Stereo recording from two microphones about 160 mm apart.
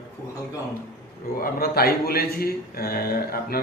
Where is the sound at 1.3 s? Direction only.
70° left (ahead or behind).